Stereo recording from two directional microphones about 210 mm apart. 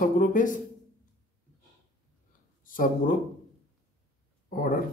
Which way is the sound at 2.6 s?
40° left (ahead or behind).